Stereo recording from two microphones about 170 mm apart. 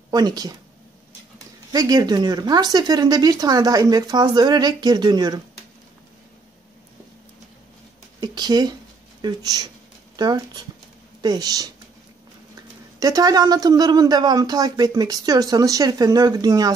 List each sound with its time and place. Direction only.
0.1 s speech: 25° right (ahead or behind)
1.7 s speech: 25° right (ahead or behind)
8.2 s speech: 25° right (ahead or behind)
13.0 s speech: 20° right (ahead or behind)